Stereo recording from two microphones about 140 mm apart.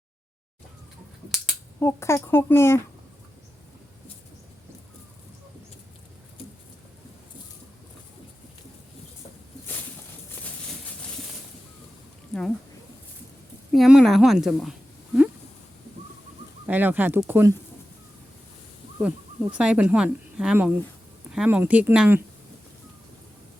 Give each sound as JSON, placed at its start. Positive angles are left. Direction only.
{"t": 1.8, "sound": "speech", "side_deg": 20}
{"t": 12.3, "sound": "a sound", "side_deg": 5}
{"t": 13.7, "sound": "a woman's voice", "side_deg": 0}
{"t": 16.6, "sound": "speech", "side_deg": -10}
{"t": 18.9, "sound": "speech", "side_deg": -10}